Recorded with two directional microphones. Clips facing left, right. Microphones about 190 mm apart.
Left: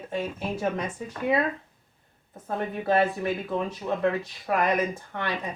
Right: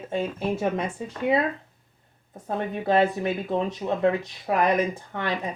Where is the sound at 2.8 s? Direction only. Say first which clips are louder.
Right 2 dB; 20° right (ahead or behind).